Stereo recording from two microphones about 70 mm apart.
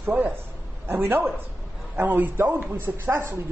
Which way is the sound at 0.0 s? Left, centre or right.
Right.